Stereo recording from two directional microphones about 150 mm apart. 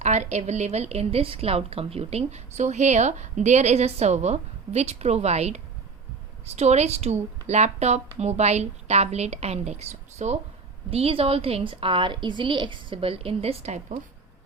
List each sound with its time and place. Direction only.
0.0 s a woman's voice: 50° right (ahead or behind)